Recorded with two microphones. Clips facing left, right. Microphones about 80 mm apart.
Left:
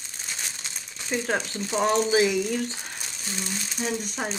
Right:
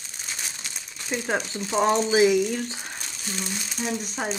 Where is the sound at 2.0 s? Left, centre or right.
Centre.